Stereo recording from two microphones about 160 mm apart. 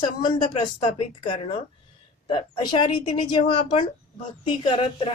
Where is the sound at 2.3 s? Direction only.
30° left (ahead or behind).